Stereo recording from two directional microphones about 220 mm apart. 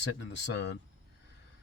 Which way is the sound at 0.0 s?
55° left (ahead or behind).